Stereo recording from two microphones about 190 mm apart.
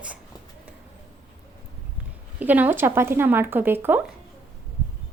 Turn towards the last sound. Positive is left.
turn(degrees=-10)  # may be behind; listen again after turning